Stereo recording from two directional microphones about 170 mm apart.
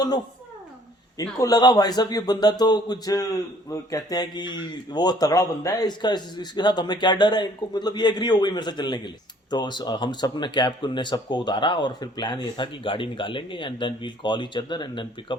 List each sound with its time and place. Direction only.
1.4 s a man's voice: 20° left (ahead or behind)